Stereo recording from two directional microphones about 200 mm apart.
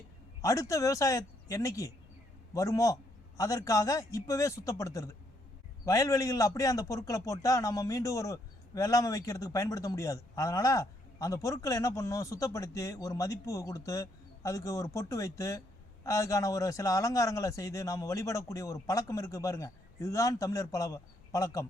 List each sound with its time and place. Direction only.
0.4 s a man's voice: 15° left (ahead or behind)